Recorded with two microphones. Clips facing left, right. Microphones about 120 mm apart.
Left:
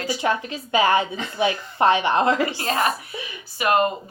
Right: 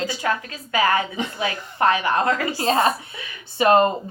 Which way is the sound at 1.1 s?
20° right (ahead or behind).